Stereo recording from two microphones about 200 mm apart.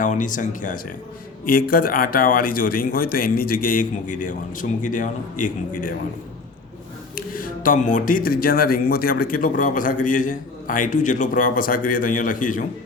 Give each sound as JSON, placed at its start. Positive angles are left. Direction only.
{"t": 0.0, "sound": "speech", "side_deg": 40}
{"t": 7.2, "sound": "speech", "side_deg": 45}